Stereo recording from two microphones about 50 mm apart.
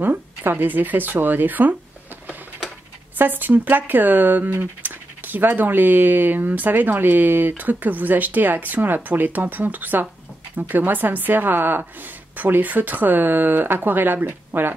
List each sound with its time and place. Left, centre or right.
0.0 s speech: right
3.2 s speech: right